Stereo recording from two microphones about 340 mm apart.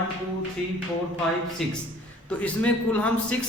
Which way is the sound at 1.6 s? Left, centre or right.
Centre.